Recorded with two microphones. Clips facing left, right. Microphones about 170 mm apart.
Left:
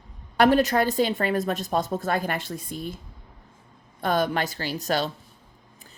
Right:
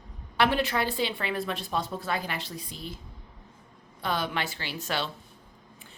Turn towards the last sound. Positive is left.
turn(degrees=40)  # may be behind; listen again after turning